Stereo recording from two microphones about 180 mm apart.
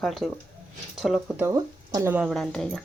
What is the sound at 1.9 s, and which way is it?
Speech, 15° right (ahead or behind).